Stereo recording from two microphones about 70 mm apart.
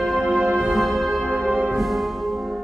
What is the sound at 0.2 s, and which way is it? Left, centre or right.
Music, centre.